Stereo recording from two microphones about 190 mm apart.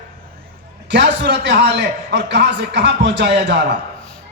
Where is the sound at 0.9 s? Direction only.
65° right (ahead or behind).